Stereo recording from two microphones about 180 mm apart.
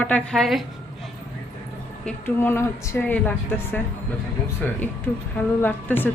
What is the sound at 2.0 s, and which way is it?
A woman's voice, 10° left (ahead or behind).